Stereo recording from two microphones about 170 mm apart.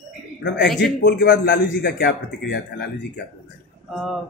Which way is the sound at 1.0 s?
65° left (ahead or behind).